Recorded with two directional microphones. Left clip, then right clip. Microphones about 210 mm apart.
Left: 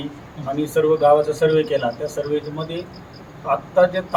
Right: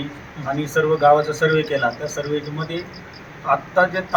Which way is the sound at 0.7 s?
15° left (ahead or behind).